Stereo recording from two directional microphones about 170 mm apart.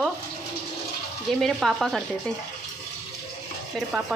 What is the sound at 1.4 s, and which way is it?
Speech, centre (ahead or behind).